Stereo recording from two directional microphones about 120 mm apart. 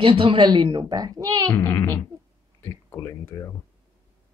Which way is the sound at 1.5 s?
20° left (ahead or behind).